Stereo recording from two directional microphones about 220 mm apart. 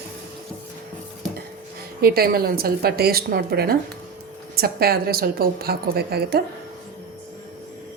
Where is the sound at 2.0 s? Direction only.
45° right (ahead or behind).